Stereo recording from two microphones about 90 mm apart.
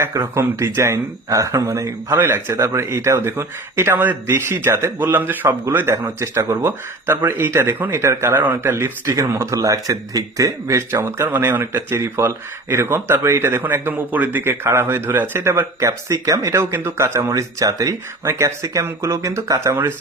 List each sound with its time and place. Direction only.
0.0 s speech: 35° right (ahead or behind)